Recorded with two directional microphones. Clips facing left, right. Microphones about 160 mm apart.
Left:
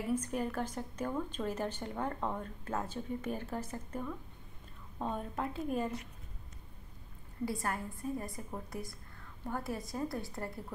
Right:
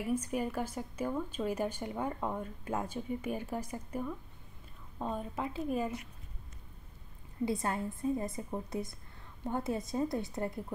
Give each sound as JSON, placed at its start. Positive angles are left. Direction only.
{"t": 0.1, "sound": "speech", "side_deg": -10}
{"t": 7.4, "sound": "a woman's voice", "side_deg": -25}